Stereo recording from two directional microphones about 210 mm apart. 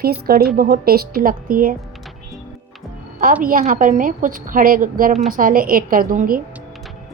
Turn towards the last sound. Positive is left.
turn(degrees=-40)  # may be behind; listen again after turning